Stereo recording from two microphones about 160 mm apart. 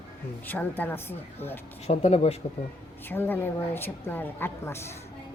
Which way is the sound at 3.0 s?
15° left (ahead or behind).